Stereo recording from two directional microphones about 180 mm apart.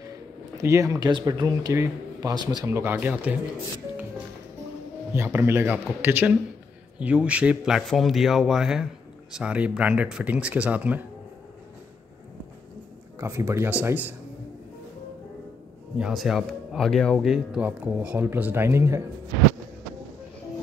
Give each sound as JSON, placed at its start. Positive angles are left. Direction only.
{"t": 0.6, "sound": "speech", "side_deg": -15}
{"t": 5.1, "sound": "speech", "side_deg": -15}
{"t": 13.2, "sound": "speech", "side_deg": -15}
{"t": 16.0, "sound": "speech", "side_deg": 0}